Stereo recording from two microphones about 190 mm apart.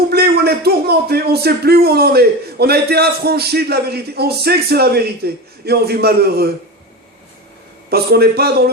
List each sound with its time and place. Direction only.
0.1 s speech: 55° right (ahead or behind)
7.9 s speech: 55° right (ahead or behind)